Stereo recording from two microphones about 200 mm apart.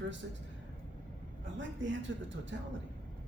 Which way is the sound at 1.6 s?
65° right (ahead or behind).